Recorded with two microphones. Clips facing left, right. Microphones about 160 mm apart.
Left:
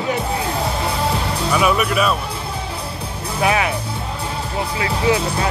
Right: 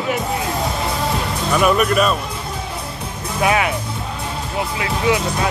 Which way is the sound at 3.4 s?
30° left (ahead or behind).